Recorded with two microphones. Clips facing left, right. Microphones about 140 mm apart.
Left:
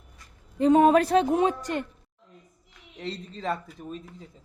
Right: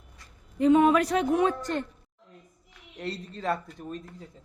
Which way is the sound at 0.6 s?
35° left (ahead or behind).